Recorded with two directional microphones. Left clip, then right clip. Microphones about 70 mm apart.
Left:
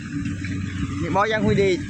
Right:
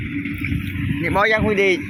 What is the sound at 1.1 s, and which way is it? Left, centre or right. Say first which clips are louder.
Speech: right 3 dB; centre.